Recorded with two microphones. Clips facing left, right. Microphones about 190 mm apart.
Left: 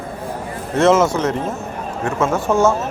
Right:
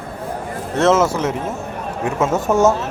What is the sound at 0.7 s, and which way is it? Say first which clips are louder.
Speech: left 1 dB; centre (ahead or behind).